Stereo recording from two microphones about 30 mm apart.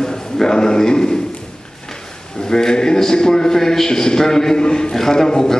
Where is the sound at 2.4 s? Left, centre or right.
Left.